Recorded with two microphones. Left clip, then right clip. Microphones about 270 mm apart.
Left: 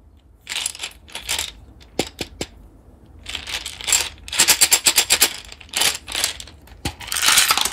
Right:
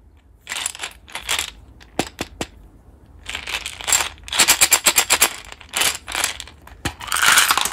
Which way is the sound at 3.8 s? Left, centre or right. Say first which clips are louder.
Even; centre.